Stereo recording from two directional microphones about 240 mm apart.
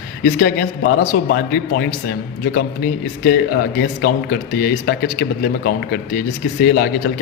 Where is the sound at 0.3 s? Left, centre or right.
Left.